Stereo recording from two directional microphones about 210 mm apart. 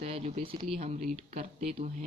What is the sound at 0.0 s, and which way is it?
Speech, 30° right (ahead or behind).